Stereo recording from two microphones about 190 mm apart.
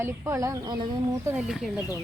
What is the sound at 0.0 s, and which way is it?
Speech, 15° right (ahead or behind).